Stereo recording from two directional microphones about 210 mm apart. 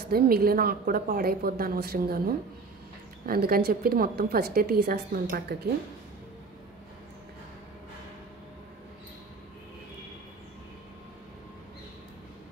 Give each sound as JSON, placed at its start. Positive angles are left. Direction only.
{"t": 0.1, "sound": "a woman's voice", "side_deg": -45}